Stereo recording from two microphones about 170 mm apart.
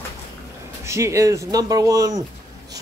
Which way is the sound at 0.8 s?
15° right (ahead or behind).